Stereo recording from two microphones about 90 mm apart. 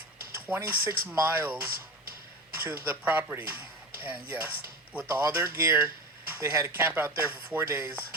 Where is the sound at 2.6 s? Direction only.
25° right (ahead or behind).